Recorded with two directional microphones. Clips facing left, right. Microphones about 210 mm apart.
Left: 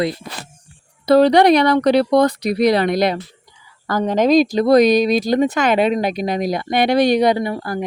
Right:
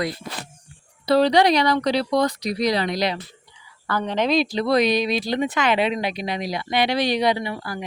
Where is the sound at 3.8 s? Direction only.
45° left (ahead or behind).